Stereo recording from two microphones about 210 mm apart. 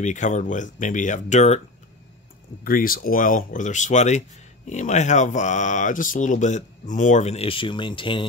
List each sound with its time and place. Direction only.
0.0 s speech: 35° left (ahead or behind)
2.6 s speech: 45° left (ahead or behind); by 8.3 s 25° left (ahead or behind)